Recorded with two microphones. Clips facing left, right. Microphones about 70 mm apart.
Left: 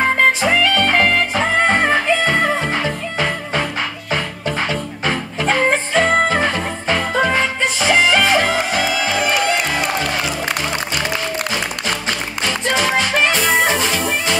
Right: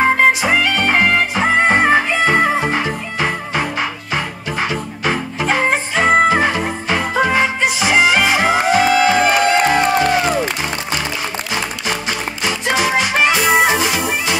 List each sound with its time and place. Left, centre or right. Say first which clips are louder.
0.0 s music: right 2 dB; centre
8.8 s music: right 6 dB; right
12.4 s music: right 1 dB; centre